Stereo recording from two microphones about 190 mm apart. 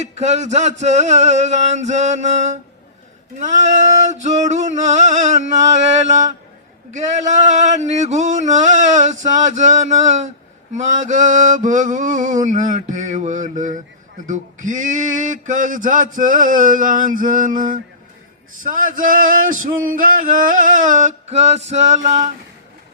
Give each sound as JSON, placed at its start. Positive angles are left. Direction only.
{"t": 0.0, "sound": "mantra", "side_deg": -35}
{"t": 7.2, "sound": "mantra", "side_deg": -40}
{"t": 14.3, "sound": "a sound", "side_deg": -40}
{"t": 19.6, "sound": "mantra", "side_deg": -45}